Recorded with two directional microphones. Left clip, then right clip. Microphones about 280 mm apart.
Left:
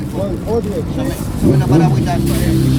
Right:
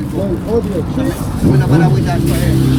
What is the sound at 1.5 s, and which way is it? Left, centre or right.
Speech, left.